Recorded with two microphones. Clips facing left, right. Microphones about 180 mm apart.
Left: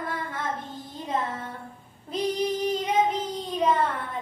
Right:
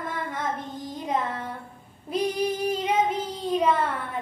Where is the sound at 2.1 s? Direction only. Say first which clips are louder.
Right 1 dB; 10° right (ahead or behind).